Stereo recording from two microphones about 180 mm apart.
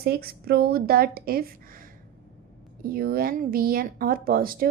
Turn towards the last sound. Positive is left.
turn(degrees=-55)  # may be behind; listen again after turning